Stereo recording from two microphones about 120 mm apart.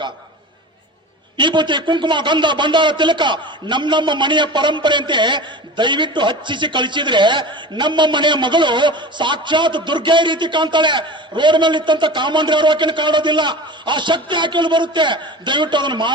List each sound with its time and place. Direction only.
1.4 s speech: 40° right (ahead or behind)